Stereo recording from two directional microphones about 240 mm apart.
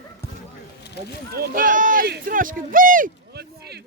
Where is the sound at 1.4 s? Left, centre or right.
Right.